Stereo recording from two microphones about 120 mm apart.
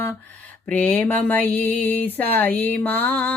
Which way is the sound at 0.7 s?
15° left (ahead or behind).